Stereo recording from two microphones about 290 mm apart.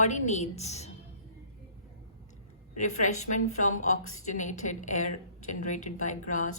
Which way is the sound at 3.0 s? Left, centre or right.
Left.